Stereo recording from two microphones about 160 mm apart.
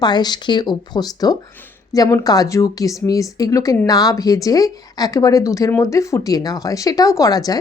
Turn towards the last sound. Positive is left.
turn(degrees=25)  # may be behind; listen again after turning